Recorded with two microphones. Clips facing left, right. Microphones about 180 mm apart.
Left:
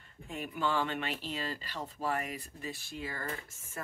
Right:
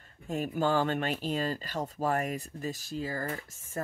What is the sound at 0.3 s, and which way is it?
Speech, 45° right (ahead or behind).